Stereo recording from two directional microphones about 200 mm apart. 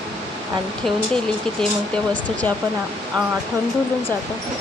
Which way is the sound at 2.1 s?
5° left (ahead or behind).